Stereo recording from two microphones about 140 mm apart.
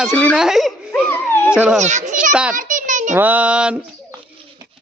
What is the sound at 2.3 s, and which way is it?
Speech, 5° right (ahead or behind).